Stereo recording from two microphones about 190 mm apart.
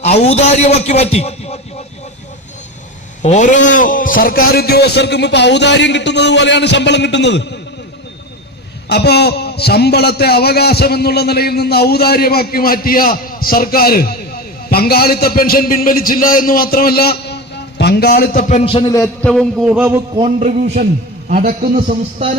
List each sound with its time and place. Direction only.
0.0 s a man's voice: 35° left (ahead or behind)
3.2 s a man's voice: 40° left (ahead or behind); by 7.6 s 65° left (ahead or behind)
8.9 s a man's voice: 60° left (ahead or behind); by 19.0 s 20° left (ahead or behind)
19.2 s a man's voice: 5° left (ahead or behind)
19.6 s a man's voice: 10° right (ahead or behind)
20.1 s a sound: 35° right (ahead or behind)
21.2 s a man's voice: 45° right (ahead or behind)